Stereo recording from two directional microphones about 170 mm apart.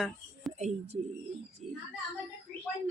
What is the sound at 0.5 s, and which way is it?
Speech, 40° right (ahead or behind).